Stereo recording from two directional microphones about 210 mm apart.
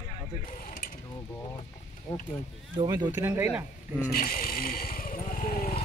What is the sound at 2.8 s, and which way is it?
Speech, 20° right (ahead or behind).